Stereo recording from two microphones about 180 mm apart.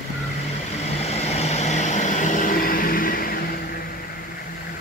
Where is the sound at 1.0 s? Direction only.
35° left (ahead or behind); by 3.6 s 55° left (ahead or behind).